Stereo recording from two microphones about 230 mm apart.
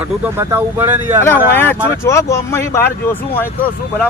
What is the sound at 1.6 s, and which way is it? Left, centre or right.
Speech, centre.